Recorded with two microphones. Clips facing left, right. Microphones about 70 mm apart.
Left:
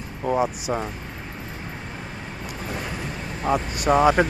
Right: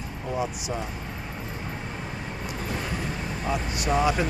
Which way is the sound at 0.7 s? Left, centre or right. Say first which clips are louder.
Left 5 dB; left.